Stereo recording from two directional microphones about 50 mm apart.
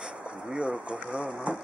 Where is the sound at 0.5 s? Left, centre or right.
Centre.